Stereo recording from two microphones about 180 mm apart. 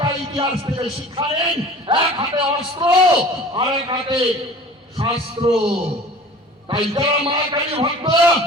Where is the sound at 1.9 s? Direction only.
30° right (ahead or behind).